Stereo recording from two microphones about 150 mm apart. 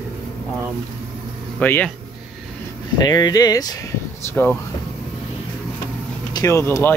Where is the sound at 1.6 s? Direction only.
10° left (ahead or behind).